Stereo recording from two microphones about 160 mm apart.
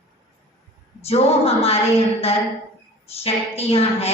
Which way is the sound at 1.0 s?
40° left (ahead or behind).